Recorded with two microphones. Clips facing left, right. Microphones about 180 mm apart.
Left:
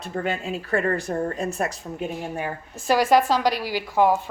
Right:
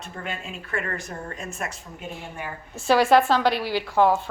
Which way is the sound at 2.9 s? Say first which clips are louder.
Right 1 dB; 5° left (ahead or behind).